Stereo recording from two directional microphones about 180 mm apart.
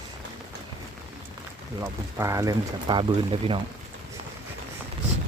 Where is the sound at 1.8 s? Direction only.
15° right (ahead or behind); by 3.6 s 30° right (ahead or behind).